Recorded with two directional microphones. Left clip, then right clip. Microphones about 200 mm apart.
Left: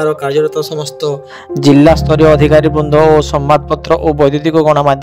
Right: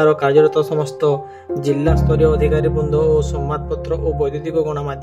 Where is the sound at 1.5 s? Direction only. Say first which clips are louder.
Left 11 dB; 40° left (ahead or behind).